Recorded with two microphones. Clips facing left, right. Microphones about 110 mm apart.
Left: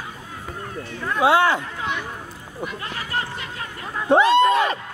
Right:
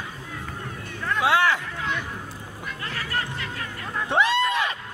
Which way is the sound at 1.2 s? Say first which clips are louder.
Left 4 dB; 30° left (ahead or behind).